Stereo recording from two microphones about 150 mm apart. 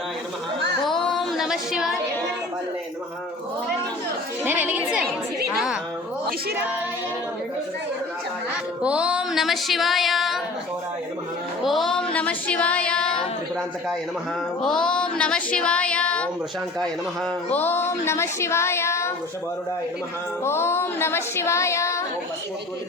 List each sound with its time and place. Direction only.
0.9 s female singing: 5° left (ahead or behind)
4.4 s music: 10° right (ahead or behind)
8.8 s music: 5° right (ahead or behind)
11.6 s music: centre (ahead or behind)
12.1 s speech: 10° left (ahead or behind)
14.6 s speech: 5° left (ahead or behind)
17.5 s speech: 15° left (ahead or behind)
20.4 s speech: 15° left (ahead or behind)